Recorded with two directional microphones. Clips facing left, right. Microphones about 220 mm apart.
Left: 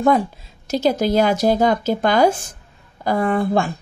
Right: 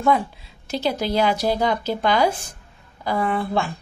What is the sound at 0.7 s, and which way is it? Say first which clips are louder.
A woman's voice: left 6 dB; 45° left (ahead or behind).